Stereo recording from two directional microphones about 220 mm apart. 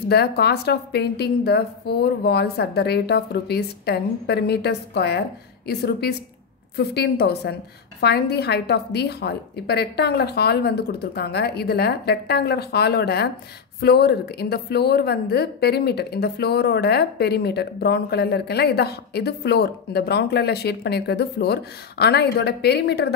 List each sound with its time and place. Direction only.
0.1 s a woman's voice: 45° left (ahead or behind)